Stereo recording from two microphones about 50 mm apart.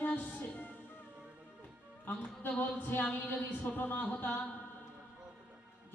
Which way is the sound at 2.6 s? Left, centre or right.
Left.